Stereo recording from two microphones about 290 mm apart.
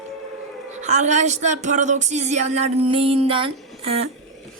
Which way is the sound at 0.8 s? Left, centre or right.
Right.